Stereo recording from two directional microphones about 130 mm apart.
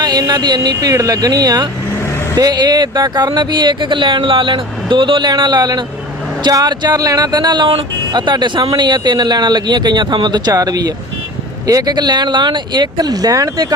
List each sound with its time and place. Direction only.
0.0 s speech: 30° right (ahead or behind)